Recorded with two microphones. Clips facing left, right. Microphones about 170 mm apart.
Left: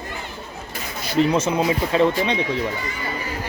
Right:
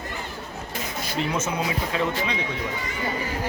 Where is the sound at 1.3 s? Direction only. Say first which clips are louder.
Left 6 dB; 30° left (ahead or behind).